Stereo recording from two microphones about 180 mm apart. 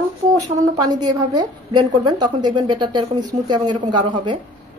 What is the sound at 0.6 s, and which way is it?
A woman's voice, 20° right (ahead or behind).